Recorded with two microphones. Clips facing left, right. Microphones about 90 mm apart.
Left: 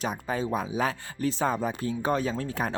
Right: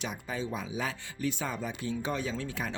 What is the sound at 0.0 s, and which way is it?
Speech, 45° left (ahead or behind).